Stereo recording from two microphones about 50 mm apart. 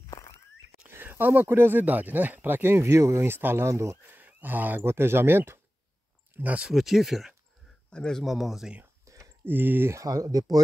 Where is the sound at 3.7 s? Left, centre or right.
Right.